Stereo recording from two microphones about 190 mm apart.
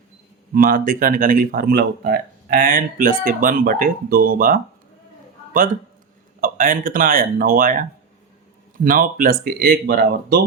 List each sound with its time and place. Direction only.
0.5 s speech: 45° right (ahead or behind)
6.4 s speech: 45° right (ahead or behind)